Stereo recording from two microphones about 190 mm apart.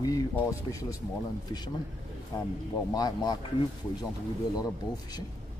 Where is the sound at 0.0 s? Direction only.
15° left (ahead or behind).